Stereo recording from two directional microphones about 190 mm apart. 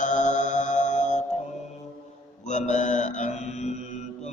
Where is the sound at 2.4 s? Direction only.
40° left (ahead or behind).